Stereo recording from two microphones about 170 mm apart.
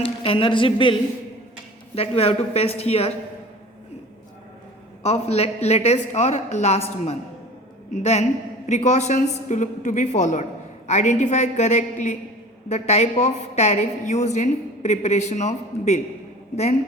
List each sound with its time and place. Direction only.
0.2 s a woman's voice: 30° left (ahead or behind)
2.0 s a woman's voice: 35° left (ahead or behind)
5.0 s a woman's voice: 40° left (ahead or behind)
8.6 s a woman's voice: 45° left (ahead or behind)